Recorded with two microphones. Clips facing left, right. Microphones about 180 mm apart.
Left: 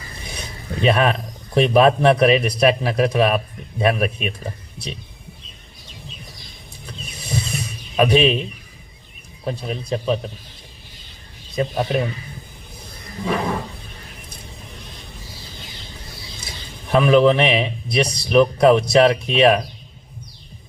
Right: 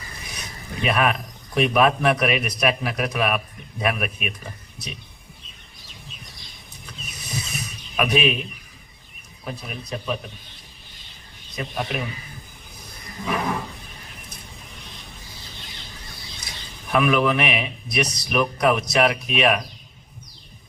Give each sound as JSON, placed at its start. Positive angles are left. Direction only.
{"t": 0.2, "sound": "a sound", "side_deg": 30}
{"t": 1.5, "sound": "a man's voice", "side_deg": 30}
{"t": 6.8, "sound": "a sound", "side_deg": 30}
{"t": 9.4, "sound": "a man's voice", "side_deg": 30}
{"t": 11.5, "sound": "a man's voice", "side_deg": 30}
{"t": 13.2, "sound": "a man's voice", "side_deg": 30}
{"t": 16.9, "sound": "a man's voice", "side_deg": 30}